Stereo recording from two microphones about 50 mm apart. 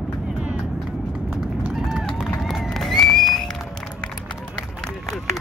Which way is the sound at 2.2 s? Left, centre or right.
Centre.